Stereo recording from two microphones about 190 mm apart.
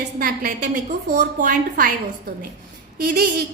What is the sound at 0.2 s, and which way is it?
A woman's voice, 50° right (ahead or behind).